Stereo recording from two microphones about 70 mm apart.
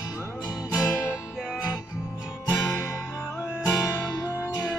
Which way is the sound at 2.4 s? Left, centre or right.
Left.